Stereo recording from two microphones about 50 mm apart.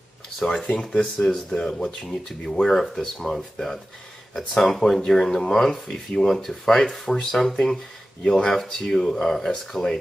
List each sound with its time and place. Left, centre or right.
0.4 s speech: centre
0.7 s speech: centre